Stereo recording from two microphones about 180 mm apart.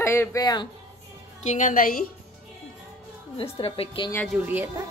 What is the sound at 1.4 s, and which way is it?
Speech, 45° left (ahead or behind).